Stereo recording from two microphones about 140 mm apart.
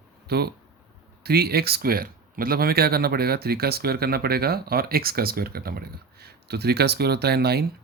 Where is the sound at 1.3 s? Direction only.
90° right.